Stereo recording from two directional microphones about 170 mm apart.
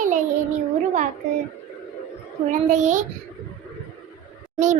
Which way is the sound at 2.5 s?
45° right (ahead or behind).